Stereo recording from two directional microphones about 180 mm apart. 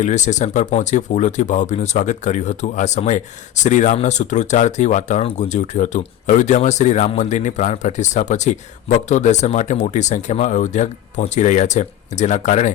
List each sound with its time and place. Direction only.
0.0 s speech: 40° left (ahead or behind)